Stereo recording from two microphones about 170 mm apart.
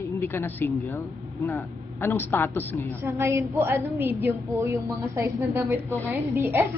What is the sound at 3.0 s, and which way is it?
Speech, 15° right (ahead or behind).